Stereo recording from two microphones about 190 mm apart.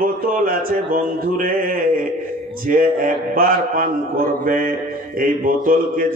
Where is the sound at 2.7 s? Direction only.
50° right (ahead or behind).